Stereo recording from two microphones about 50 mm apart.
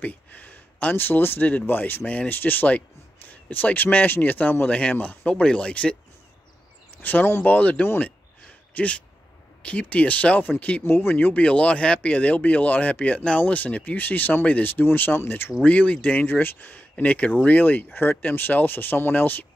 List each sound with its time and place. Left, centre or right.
0.0 s speech: left
7.0 s speech: left
8.7 s speech: left
10.8 s speech: left
11.1 s speech: left
15.6 s speech: left
16.3 s speech: left